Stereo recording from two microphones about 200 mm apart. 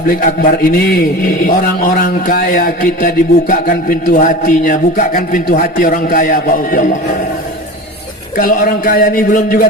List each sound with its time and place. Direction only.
0.1 s speech: 45° left (ahead or behind)
8.4 s speech: 45° left (ahead or behind)